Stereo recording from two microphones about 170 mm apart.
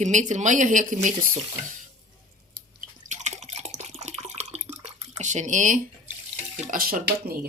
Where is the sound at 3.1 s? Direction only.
45° right (ahead or behind).